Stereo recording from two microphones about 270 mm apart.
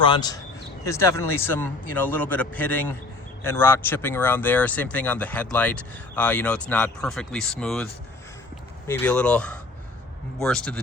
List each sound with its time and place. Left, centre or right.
0.0 s a man's voice: centre
8.9 s speech: centre